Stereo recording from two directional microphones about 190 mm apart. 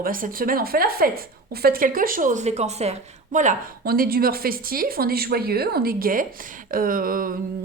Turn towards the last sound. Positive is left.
turn(degrees=-50)  # may be behind; listen again after turning